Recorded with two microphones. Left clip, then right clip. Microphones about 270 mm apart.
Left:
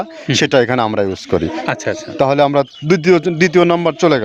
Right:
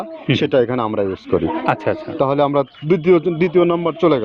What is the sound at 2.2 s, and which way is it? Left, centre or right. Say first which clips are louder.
A man's voice: left 5 dB; left.